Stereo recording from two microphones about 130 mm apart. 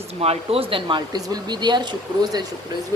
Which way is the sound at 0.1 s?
50° right (ahead or behind).